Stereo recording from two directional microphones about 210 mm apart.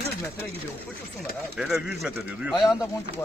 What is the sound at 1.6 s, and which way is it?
Speech, centre (ahead or behind).